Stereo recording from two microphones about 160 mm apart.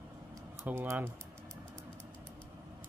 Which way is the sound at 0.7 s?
10° right (ahead or behind).